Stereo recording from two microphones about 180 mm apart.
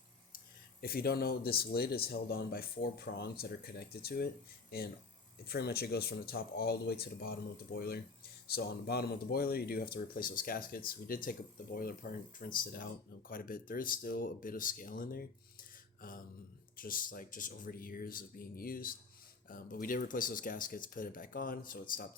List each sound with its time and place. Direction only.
0.3 s speech: 55° left (ahead or behind)
5.5 s speech: 60° left (ahead or behind)
16.0 s mantra: 50° left (ahead or behind)
16.7 s speech: 50° left (ahead or behind)